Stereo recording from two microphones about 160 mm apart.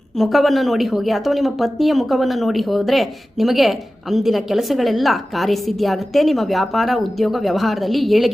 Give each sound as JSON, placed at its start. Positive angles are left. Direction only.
{"t": 0.2, "sound": "speech", "side_deg": 0}